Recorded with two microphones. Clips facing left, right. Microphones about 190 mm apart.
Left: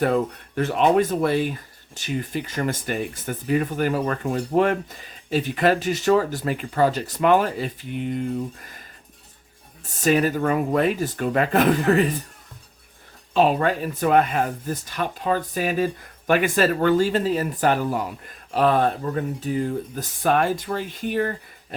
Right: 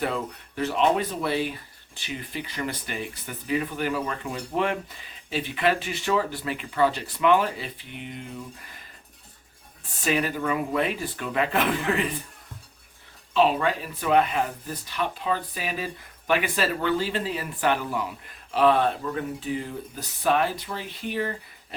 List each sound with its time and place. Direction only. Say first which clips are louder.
0.0 s speech: left 7 dB; 50° left (ahead or behind)
9.8 s speech: left 6 dB; 40° left (ahead or behind)
13.3 s speech: left 3 dB; 45° left (ahead or behind)